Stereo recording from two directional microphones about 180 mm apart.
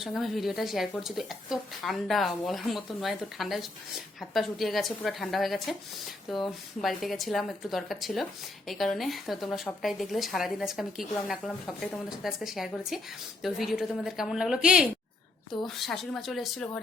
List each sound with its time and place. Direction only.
0.0 s speech: centre (ahead or behind)